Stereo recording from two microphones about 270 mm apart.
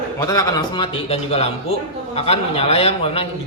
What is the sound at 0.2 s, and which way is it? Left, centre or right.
A man's voice, centre.